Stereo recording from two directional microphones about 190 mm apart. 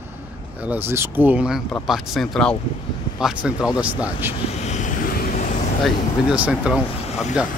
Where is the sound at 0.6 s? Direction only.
10° right (ahead or behind).